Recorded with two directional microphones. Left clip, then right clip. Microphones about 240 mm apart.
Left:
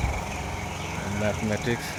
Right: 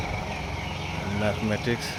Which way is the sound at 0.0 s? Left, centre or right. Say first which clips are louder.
Even; left.